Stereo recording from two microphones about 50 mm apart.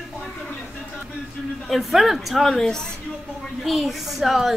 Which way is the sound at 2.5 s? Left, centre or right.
Centre.